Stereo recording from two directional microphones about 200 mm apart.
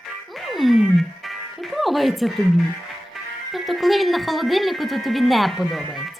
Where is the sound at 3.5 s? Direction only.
Centre (ahead or behind).